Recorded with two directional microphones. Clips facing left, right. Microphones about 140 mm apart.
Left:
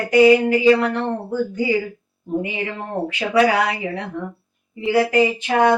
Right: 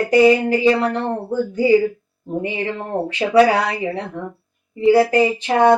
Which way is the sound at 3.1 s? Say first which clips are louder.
Right 4 dB; 35° right (ahead or behind).